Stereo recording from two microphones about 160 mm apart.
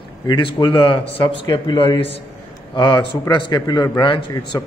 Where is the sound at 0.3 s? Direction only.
30° left (ahead or behind).